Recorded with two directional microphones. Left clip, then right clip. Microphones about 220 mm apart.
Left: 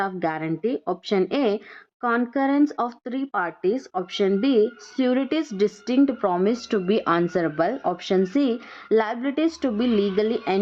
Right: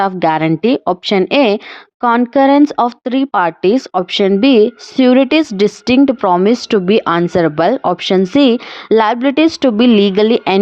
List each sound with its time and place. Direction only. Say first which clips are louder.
0.0 s a woman's voice: right 13 dB; 40° right (ahead or behind)